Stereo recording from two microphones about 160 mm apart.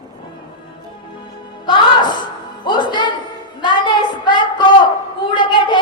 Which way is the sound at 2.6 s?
30° left (ahead or behind).